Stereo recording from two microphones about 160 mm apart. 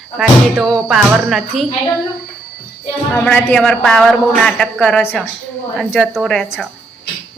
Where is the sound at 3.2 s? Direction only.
10° left (ahead or behind).